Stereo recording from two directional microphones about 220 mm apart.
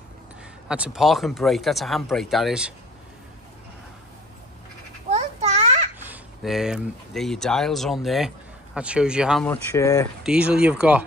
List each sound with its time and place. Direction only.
0.7 s speech: 5° right (ahead or behind)
5.1 s a sound: 30° right (ahead or behind)
5.9 s speech: 10° right (ahead or behind); by 10.0 s 15° left (ahead or behind)
10.2 s speech: 5° right (ahead or behind)